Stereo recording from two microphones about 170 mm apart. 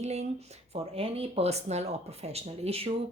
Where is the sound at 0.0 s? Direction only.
40° right (ahead or behind).